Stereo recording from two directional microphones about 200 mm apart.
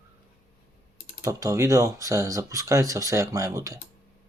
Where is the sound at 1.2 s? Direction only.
15° right (ahead or behind).